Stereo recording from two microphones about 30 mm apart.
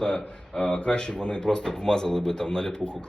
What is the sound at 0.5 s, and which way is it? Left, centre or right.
Speech, centre.